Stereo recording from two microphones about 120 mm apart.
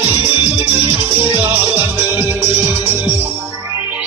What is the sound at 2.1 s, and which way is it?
Music, 15° right (ahead or behind).